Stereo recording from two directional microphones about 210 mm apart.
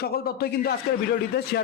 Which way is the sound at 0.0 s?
45° left (ahead or behind).